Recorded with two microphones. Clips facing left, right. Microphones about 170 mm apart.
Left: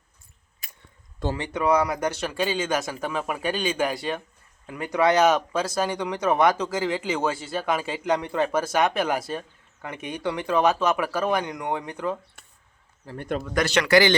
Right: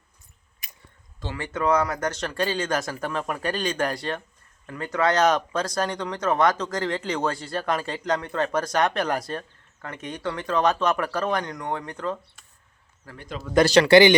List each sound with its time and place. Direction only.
1.4 s speech: 10° left (ahead or behind)
13.1 s speech: 55° left (ahead or behind)
13.5 s a man's voice: 30° right (ahead or behind)